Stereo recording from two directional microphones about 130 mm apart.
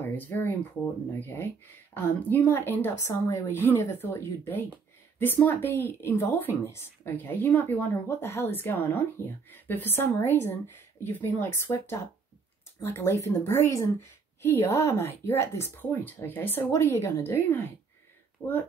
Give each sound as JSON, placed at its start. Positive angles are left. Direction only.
{"t": 0.0, "sound": "a woman's voice", "side_deg": 15}
{"t": 18.4, "sound": "speech", "side_deg": 30}